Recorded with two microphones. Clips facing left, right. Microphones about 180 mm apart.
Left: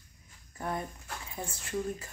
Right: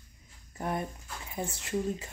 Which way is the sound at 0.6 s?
20° right (ahead or behind).